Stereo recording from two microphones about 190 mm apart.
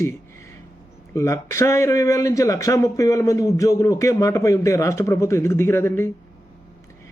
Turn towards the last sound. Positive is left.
turn(degrees=10)  # may be behind; listen again after turning